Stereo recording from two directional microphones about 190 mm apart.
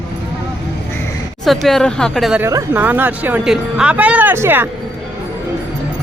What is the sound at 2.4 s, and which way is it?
Speech, 10° right (ahead or behind).